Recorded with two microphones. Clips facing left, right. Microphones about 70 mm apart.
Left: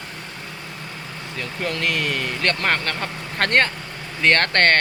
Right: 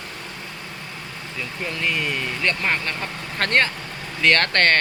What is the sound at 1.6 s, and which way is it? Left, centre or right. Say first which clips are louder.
Speech: left 2 dB; left.